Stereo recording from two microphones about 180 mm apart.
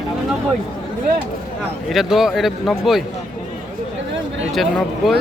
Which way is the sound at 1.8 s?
Centre (ahead or behind).